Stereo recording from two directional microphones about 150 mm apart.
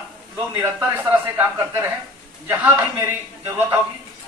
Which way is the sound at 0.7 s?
10° right (ahead or behind).